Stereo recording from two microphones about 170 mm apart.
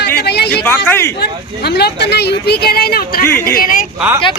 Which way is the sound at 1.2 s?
70° left (ahead or behind).